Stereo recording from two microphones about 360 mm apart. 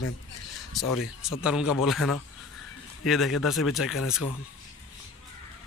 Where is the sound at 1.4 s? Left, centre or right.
Centre.